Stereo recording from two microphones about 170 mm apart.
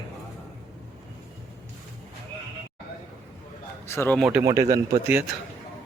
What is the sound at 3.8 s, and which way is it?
Speech, 15° left (ahead or behind).